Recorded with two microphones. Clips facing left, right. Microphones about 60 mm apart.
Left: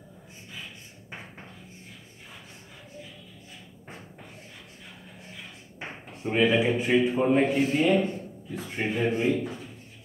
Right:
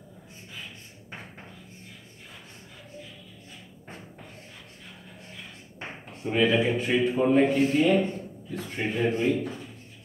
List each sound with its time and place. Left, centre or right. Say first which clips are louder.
6.3 s a man's voice: even; centre